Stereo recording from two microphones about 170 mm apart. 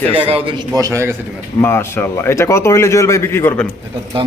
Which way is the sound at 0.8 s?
20° right (ahead or behind).